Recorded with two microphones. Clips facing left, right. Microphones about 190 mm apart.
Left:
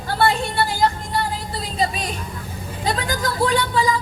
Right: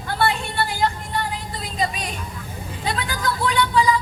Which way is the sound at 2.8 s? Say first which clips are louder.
Left 3 dB; 40° left (ahead or behind).